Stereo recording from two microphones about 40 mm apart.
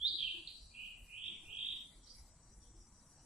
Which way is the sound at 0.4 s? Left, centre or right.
Centre.